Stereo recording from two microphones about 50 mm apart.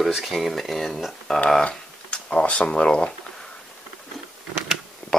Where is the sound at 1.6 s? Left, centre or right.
Left.